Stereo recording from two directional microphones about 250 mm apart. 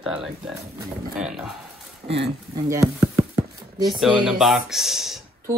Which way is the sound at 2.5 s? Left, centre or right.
Centre.